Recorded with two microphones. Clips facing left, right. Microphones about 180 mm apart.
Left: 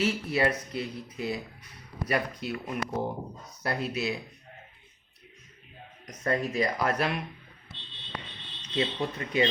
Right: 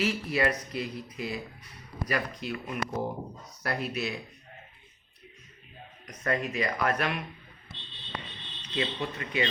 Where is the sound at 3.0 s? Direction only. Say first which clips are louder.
Left 1 dB; 25° left (ahead or behind).